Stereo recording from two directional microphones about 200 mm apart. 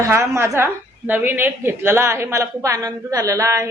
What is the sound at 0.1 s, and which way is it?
A woman's voice, 15° right (ahead or behind).